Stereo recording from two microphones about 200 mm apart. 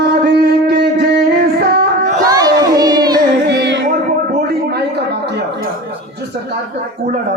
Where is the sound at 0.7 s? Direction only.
55° right (ahead or behind).